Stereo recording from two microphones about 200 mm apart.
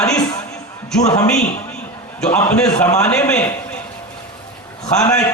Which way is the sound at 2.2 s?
10° left (ahead or behind).